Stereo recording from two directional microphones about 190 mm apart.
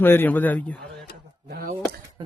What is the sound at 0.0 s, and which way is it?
A man's voice, 10° left (ahead or behind).